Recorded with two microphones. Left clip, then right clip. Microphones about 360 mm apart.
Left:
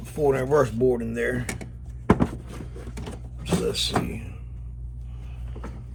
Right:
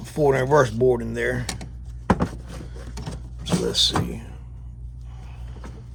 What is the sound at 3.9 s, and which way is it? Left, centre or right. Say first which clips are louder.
Speech: right 1 dB; centre.